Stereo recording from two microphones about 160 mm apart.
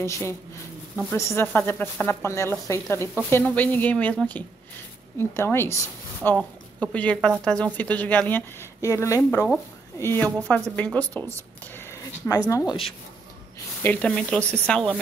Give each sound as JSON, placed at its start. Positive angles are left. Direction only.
{"t": 0.0, "sound": "a woman's voice", "side_deg": 15}
{"t": 11.6, "sound": "a sound", "side_deg": 15}
{"t": 12.4, "sound": "speech", "side_deg": 20}
{"t": 13.8, "sound": "speech", "side_deg": 5}